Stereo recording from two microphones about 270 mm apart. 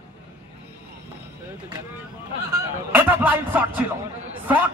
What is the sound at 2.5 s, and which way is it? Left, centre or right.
A man's voice, centre.